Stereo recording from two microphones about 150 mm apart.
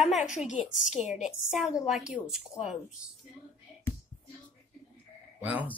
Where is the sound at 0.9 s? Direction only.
5° right (ahead or behind).